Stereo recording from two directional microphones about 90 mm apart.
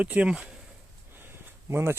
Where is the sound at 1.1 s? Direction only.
25° right (ahead or behind).